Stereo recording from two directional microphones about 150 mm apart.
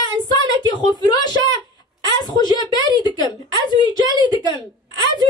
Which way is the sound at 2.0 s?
30° left (ahead or behind).